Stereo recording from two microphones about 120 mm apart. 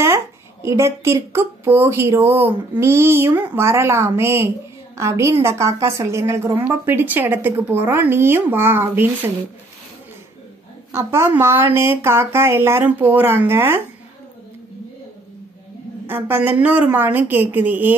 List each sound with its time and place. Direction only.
0.0 s a woman's voice: 20° right (ahead or behind)
10.9 s speech: 20° right (ahead or behind)
16.1 s a woman's voice: 15° right (ahead or behind)